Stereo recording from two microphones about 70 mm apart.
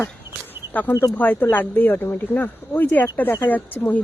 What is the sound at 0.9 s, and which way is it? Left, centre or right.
Speech, left.